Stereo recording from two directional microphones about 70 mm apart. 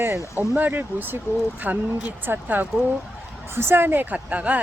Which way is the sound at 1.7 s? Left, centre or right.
Centre.